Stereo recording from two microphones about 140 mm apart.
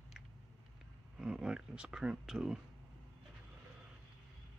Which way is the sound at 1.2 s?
5° right (ahead or behind).